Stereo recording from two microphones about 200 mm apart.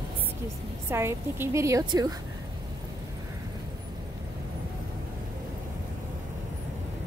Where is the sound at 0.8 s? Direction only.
10° right (ahead or behind).